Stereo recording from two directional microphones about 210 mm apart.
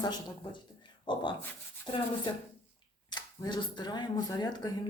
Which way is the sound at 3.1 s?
20° left (ahead or behind).